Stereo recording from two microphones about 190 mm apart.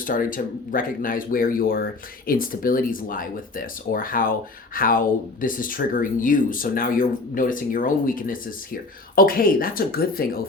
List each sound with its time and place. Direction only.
0.0 s speech: 45° left (ahead or behind)